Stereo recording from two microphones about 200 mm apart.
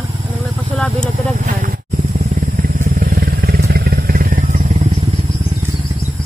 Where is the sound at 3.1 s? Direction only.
50° right (ahead or behind); by 5.2 s 25° right (ahead or behind).